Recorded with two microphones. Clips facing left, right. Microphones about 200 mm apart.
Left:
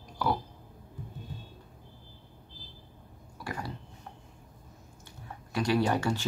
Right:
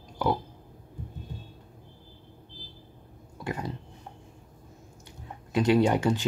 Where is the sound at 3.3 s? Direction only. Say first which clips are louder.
Right 4 dB; 20° right (ahead or behind).